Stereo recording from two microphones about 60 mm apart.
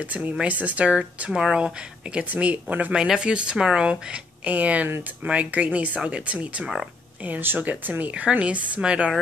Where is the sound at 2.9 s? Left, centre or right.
Centre.